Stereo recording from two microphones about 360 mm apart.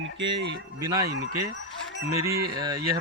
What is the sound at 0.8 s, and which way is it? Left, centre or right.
Speech, centre.